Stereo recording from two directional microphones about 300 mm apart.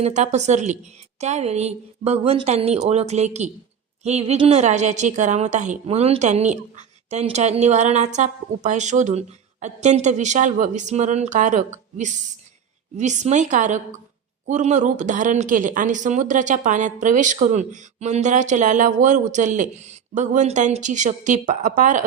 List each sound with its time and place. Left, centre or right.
0.0 s a woman's voice: right